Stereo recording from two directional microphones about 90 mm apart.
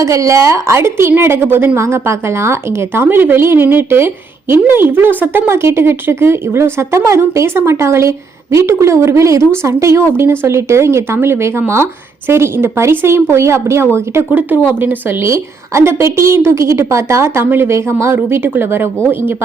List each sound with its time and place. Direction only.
0.0 s a woman's voice: 35° right (ahead or behind)